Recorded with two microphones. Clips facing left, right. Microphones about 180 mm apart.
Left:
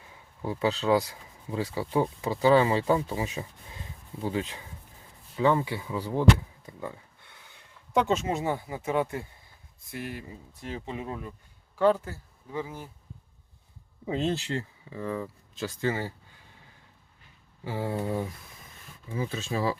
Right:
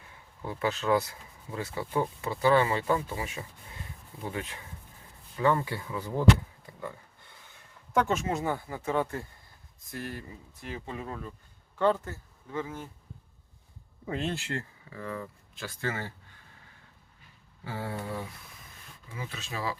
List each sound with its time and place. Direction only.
0.4 s speech: 15° left (ahead or behind)
7.9 s speech: 20° left (ahead or behind)
14.1 s speech: 25° left (ahead or behind)
17.6 s speech: 20° left (ahead or behind)